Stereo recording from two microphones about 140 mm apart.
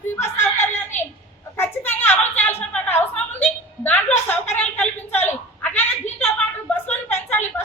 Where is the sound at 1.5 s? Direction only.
15° left (ahead or behind).